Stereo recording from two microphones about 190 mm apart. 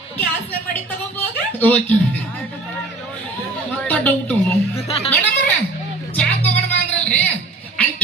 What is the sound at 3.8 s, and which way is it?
Speech, 10° left (ahead or behind).